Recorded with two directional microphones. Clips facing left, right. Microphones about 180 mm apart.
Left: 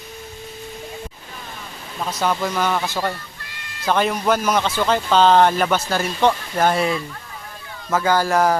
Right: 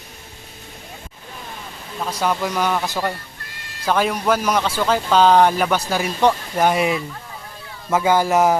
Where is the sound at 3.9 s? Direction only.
5° right (ahead or behind).